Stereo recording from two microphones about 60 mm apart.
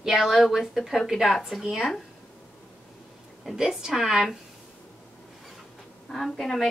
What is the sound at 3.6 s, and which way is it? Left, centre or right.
Speech, centre.